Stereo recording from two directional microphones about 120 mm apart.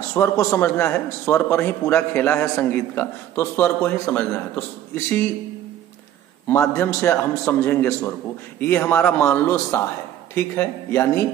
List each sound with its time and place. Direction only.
0.1 s a man's voice: 25° left (ahead or behind)
6.5 s a man's voice: 20° left (ahead or behind)